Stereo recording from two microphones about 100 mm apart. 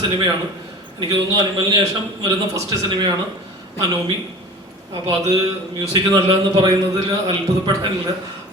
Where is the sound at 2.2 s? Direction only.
40° right (ahead or behind).